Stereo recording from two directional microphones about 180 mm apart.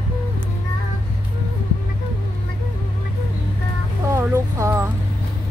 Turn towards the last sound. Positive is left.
turn(degrees=-15)  # may be behind; listen again after turning